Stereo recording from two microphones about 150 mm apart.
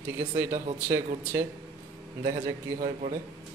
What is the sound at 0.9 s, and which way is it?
Speech, 20° right (ahead or behind).